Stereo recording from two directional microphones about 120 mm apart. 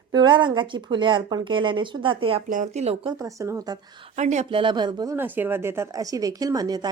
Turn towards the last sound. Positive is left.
turn(degrees=-35)  # may be behind; listen again after turning